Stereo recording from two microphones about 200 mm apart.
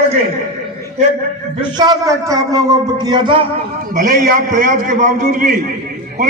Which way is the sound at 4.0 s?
40° right (ahead or behind).